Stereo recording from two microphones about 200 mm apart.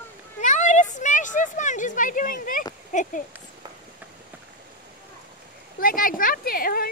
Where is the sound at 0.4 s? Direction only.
40° left (ahead or behind).